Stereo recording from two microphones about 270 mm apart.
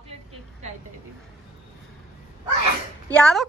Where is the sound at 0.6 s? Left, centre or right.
Right.